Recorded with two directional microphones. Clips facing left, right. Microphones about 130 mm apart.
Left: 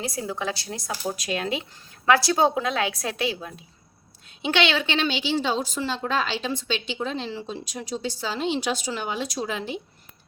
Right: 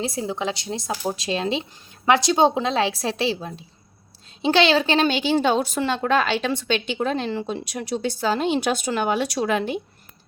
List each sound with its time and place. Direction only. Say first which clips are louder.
0.0 s a woman's voice: right 3 dB; 25° right (ahead or behind); by 9.8 s 60° right (ahead or behind)